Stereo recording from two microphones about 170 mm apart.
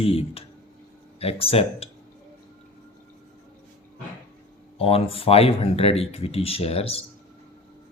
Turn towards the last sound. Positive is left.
turn(degrees=35)  # may be behind; listen again after turning